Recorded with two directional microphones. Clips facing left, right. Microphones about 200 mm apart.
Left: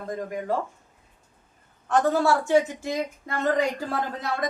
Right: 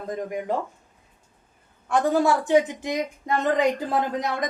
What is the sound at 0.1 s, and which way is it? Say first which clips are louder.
Speech: right 1 dB; 20° right (ahead or behind).